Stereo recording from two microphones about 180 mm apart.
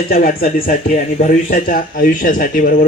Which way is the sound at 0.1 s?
55° left (ahead or behind).